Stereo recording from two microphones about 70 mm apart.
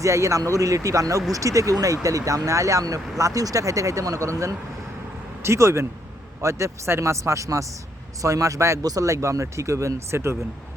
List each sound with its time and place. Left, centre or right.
0.0 s speech: right
8.8 s speech: right